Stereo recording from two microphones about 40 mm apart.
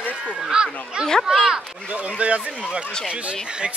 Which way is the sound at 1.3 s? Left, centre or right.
Centre.